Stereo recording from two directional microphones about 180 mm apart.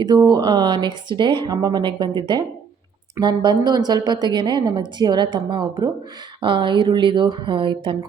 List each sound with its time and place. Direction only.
0.0 s a woman's voice: 20° right (ahead or behind)